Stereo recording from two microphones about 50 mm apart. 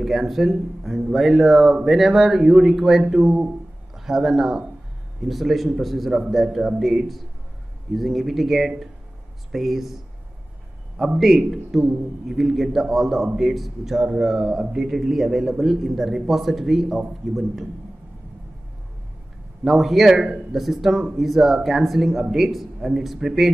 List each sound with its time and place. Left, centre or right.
0.0 s a man's voice: centre
11.1 s a man's voice: centre
14.8 s a man's voice: centre
19.6 s a man's voice: centre